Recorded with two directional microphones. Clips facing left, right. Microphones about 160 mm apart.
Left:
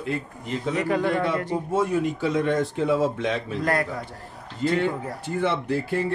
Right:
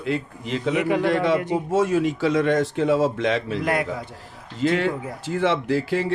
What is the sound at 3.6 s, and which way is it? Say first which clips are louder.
Speech: right 1 dB; 15° right (ahead or behind).